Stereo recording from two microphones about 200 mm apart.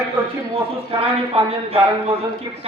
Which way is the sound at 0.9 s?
30° right (ahead or behind).